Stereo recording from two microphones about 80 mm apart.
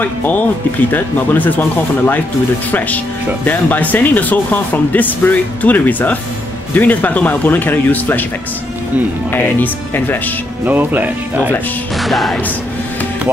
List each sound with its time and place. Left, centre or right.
0.0 s speech: left
3.4 s speech: left
9.3 s speech: left
10.6 s speech: right
12.0 s music: centre